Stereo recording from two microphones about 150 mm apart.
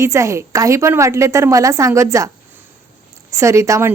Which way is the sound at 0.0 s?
20° right (ahead or behind).